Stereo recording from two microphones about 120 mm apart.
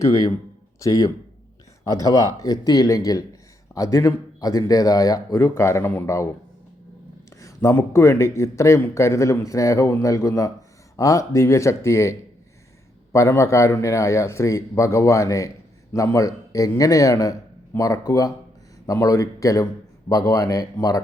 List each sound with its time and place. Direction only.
0.0 s speech: 30° left (ahead or behind)
7.3 s speech: 25° left (ahead or behind)
13.1 s speech: 25° left (ahead or behind)